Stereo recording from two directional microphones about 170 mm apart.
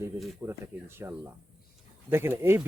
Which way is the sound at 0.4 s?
15° right (ahead or behind).